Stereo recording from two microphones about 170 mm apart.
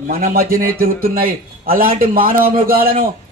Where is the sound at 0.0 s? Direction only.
60° right (ahead or behind).